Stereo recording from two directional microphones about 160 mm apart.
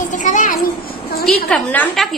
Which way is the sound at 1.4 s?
5° left (ahead or behind).